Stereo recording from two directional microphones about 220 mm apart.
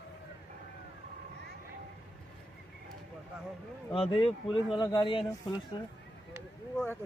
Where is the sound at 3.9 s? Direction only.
25° left (ahead or behind).